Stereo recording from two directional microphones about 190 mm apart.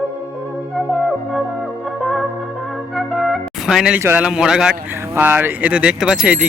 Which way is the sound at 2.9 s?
Centre (ahead or behind).